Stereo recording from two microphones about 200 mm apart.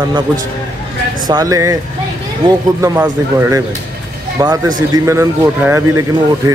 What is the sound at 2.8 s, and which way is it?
Speech, 10° right (ahead or behind).